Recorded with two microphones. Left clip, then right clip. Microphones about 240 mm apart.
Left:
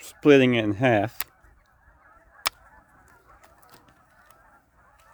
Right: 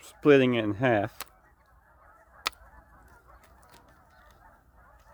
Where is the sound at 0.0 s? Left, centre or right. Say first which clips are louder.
Left 3 dB; left.